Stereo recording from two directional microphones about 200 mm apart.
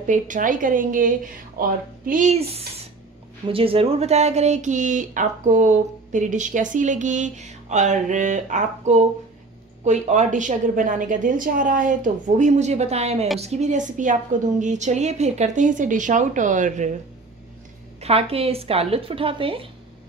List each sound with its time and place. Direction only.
0.0 s speech: 40° right (ahead or behind)
18.0 s speech: 30° right (ahead or behind)